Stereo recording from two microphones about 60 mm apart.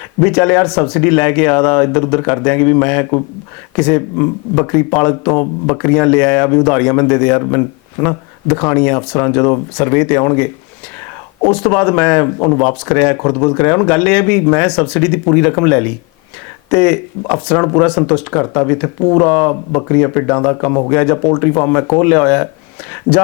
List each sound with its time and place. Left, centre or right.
0.2 s speech: centre